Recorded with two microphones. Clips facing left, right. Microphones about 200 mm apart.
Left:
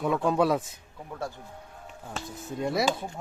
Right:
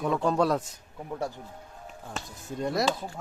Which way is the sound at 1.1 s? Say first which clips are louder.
Right 3 dB; 15° right (ahead or behind).